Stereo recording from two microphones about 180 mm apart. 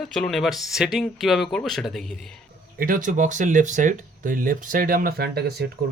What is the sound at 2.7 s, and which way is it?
Speech, 50° right (ahead or behind).